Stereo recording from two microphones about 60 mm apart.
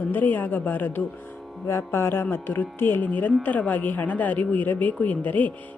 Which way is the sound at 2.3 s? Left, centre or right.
Left.